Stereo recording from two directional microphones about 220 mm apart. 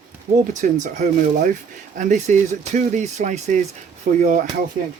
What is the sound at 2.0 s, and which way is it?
Speech, 35° right (ahead or behind).